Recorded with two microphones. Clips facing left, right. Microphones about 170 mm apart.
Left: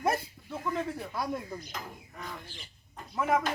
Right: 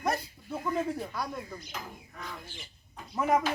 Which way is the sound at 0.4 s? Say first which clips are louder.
Right 4 dB; 10° right (ahead or behind).